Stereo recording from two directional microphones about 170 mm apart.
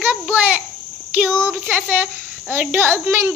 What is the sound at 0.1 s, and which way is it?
Insect, 10° right (ahead or behind).